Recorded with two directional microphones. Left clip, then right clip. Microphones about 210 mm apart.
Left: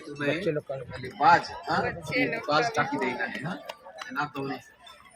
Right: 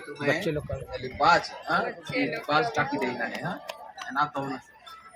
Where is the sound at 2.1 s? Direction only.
45° left (ahead or behind).